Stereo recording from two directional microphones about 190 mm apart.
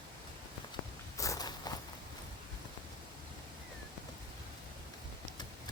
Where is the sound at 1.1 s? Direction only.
15° left (ahead or behind).